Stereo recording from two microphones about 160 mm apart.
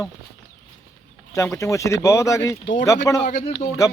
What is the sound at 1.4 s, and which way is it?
Speech, 20° left (ahead or behind).